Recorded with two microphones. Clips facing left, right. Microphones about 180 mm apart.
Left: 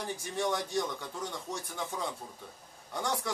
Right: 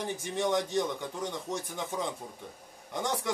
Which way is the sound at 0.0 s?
20° right (ahead or behind).